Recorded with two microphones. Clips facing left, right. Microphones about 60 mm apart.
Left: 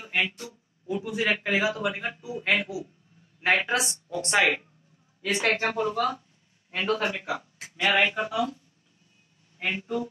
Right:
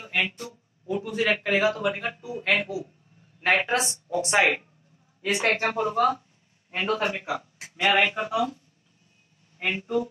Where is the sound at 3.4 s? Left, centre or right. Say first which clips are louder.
Right 1 dB; centre.